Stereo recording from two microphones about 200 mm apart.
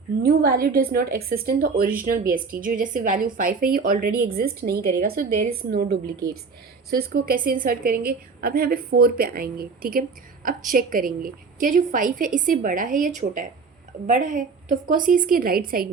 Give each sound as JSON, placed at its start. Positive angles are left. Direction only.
{"t": 0.2, "sound": "a woman's voice", "side_deg": -50}